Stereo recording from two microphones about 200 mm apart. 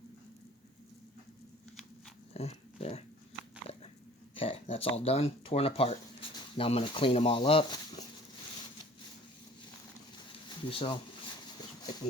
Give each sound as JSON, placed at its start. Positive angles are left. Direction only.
{"t": 2.3, "sound": "pig", "side_deg": 30}
{"t": 4.4, "sound": "a sound", "side_deg": 30}
{"t": 4.7, "sound": "speech", "side_deg": 30}
{"t": 10.7, "sound": "speech", "side_deg": 25}